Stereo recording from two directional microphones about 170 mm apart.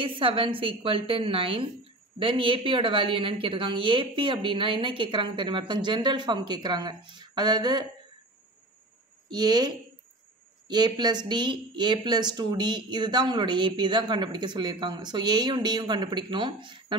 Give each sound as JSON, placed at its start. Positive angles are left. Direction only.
{"t": 0.0, "sound": "a woman's voice", "side_deg": -30}
{"t": 9.3, "sound": "speech", "side_deg": -25}
{"t": 10.7, "sound": "speech", "side_deg": -25}